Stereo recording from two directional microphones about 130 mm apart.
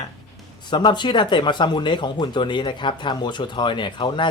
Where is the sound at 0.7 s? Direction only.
35° left (ahead or behind).